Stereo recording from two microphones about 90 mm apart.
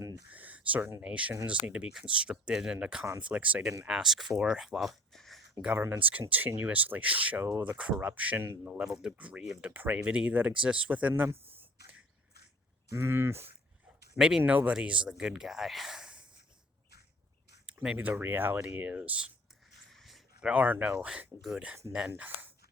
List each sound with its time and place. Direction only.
0.3 s a sound: 15° right (ahead or behind)
1.0 s speech: 15° right (ahead or behind); by 5.4 s centre (ahead or behind)
5.7 s speech: 20° right (ahead or behind)
8.7 s speech: 10° right (ahead or behind)
11.4 s a sound: 20° right (ahead or behind)
12.9 s speech: 30° right (ahead or behind)
14.2 s speech: 10° right (ahead or behind)
17.9 s speech: 20° right (ahead or behind)
19.9 s a sound: centre (ahead or behind)
20.5 s speech: 20° right (ahead or behind)
22.2 s speech: 20° right (ahead or behind)